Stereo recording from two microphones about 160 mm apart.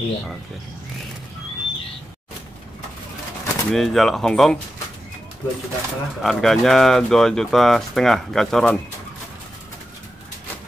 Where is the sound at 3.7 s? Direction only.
Centre (ahead or behind).